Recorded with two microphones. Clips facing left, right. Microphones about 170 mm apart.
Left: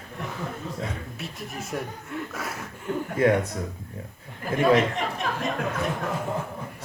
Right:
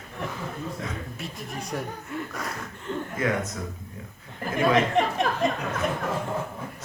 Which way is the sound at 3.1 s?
30° left (ahead or behind).